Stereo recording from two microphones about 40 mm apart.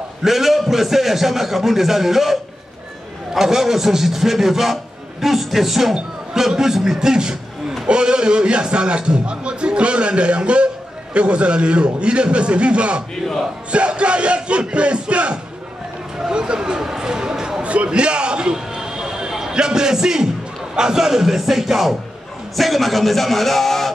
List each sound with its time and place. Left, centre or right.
0.2 s a man's voice: centre
3.3 s a man's voice: centre
5.9 s a man's voice: centre
13.7 s a sound: right
17.6 s a sound: right
19.5 s a man's voice: centre